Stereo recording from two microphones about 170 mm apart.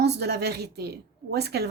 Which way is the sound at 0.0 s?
75° right (ahead or behind).